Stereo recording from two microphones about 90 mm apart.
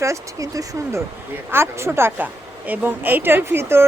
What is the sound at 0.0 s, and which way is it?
Speech, 35° right (ahead or behind).